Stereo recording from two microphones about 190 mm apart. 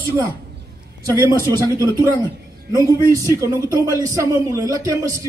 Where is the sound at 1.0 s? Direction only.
20° right (ahead or behind).